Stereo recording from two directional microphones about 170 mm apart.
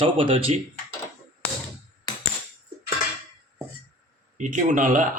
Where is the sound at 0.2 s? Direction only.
35° right (ahead or behind).